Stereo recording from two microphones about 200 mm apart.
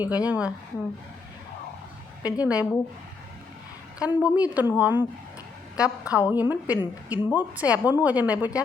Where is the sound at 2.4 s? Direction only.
5° right (ahead or behind).